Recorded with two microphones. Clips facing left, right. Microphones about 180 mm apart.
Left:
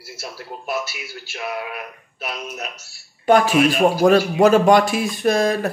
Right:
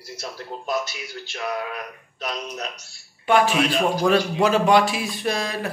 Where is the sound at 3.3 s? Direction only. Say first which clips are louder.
Left 4 dB; 45° left (ahead or behind).